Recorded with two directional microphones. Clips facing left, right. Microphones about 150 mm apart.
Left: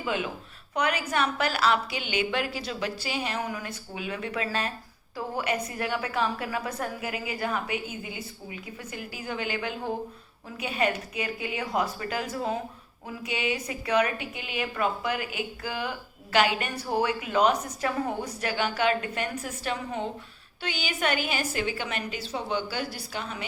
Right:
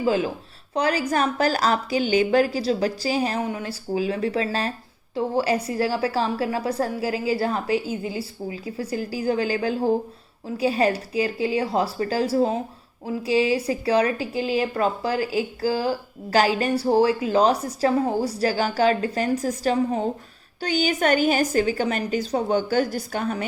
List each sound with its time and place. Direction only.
0.0 s a woman's voice: 35° right (ahead or behind)